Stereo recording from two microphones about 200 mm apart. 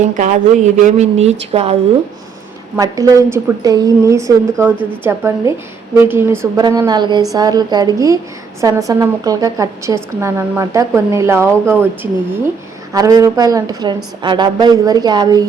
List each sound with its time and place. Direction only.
0.2 s speech: 35° right (ahead or behind)
2.7 s a woman's voice: 15° right (ahead or behind)
12.9 s a woman's voice: 15° right (ahead or behind)